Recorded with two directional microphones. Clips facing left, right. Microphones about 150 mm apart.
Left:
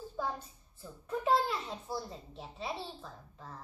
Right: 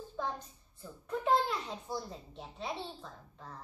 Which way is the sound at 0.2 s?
5° left (ahead or behind).